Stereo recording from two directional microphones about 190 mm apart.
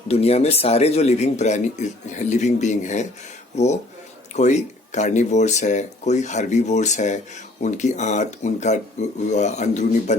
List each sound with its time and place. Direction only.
0.1 s speech: 30° left (ahead or behind)